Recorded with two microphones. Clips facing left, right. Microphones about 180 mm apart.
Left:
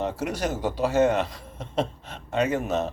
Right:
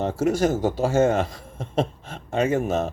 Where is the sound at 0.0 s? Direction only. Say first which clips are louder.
Right 6 dB; 45° right (ahead or behind).